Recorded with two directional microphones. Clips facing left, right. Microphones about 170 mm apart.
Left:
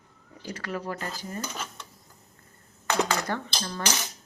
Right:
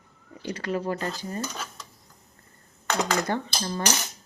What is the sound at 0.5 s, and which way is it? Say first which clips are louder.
Speech: right 5 dB; 25° right (ahead or behind).